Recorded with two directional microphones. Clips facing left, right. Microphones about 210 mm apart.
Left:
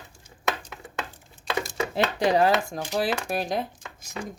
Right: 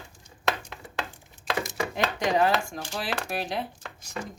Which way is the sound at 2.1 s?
35° left (ahead or behind).